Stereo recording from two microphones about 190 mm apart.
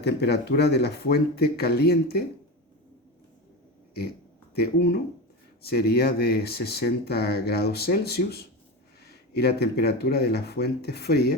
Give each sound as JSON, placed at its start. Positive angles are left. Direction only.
{"t": 0.0, "sound": "speech", "side_deg": 60}
{"t": 4.5, "sound": "speech", "side_deg": 60}